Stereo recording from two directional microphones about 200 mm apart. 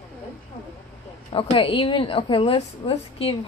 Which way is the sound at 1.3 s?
25° left (ahead or behind).